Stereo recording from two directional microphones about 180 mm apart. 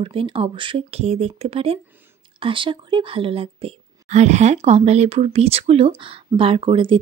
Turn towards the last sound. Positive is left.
turn(degrees=-30)  # may be behind; listen again after turning